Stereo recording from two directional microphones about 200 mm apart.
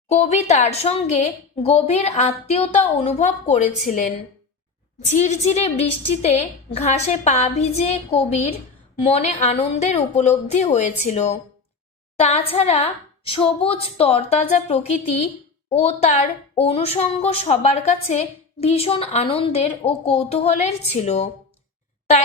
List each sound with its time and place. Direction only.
0.1 s a woman's voice: 35° left (ahead or behind)
5.0 s a woman's voice: 35° left (ahead or behind)